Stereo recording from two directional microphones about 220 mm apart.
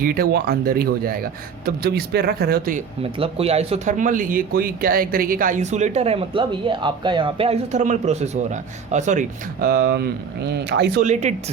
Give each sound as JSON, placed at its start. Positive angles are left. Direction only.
{"t": 0.0, "sound": "speech", "side_deg": -45}
{"t": 3.0, "sound": "speech", "side_deg": -25}
{"t": 11.0, "sound": "speech", "side_deg": -30}